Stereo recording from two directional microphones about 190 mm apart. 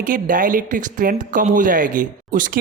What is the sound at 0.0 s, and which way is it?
Speech, 45° right (ahead or behind).